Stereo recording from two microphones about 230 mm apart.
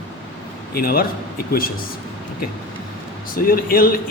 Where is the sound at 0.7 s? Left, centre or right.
Left.